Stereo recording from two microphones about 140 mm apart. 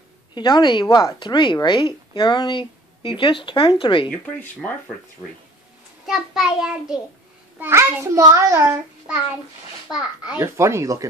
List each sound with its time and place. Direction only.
0.3 s speech: 30° left (ahead or behind)
4.1 s speech: 10° left (ahead or behind)
6.0 s child singing: centre (ahead or behind)
7.5 s a child's voice: 15° right (ahead or behind)
8.6 s a child's voice: 5° right (ahead or behind)
9.9 s child singing: 5° right (ahead or behind)
10.4 s a child's voice: 20° right (ahead or behind)